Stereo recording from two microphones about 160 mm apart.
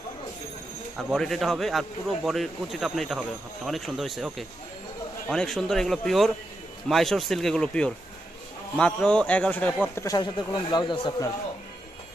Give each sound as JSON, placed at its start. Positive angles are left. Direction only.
{"t": 0.9, "sound": "speech", "side_deg": 0}
{"t": 9.9, "sound": "speech", "side_deg": 20}